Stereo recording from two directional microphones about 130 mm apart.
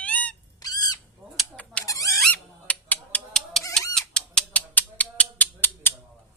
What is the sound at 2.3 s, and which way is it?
Fowl, 15° left (ahead or behind).